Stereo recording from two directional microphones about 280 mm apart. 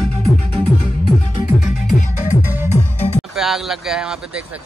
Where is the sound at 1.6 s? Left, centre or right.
Left.